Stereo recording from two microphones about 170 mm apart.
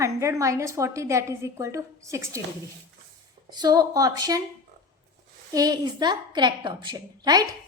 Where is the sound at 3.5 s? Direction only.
25° right (ahead or behind).